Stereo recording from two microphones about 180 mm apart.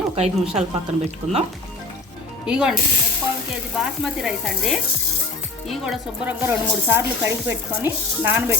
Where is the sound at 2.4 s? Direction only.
5° right (ahead or behind).